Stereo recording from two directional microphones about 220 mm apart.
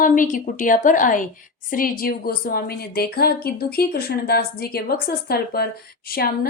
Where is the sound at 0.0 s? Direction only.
40° left (ahead or behind).